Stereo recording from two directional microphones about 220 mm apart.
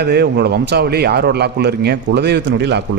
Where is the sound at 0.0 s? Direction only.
45° right (ahead or behind).